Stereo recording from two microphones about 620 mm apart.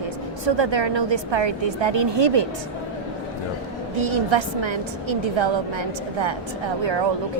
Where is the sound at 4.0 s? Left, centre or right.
Right.